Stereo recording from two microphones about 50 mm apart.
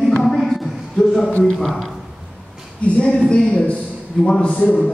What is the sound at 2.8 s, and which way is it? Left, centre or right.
Speech, left.